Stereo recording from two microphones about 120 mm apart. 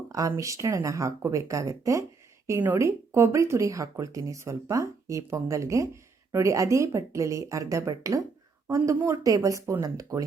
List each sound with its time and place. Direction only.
0.1 s a woman's voice: 25° right (ahead or behind)